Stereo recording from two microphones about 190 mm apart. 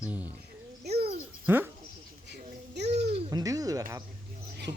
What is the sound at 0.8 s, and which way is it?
Owl, 30° right (ahead or behind).